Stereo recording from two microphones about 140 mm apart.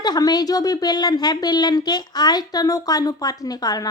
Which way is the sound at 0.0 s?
30° left (ahead or behind).